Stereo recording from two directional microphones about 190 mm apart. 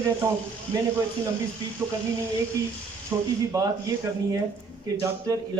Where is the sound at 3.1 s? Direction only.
15° right (ahead or behind).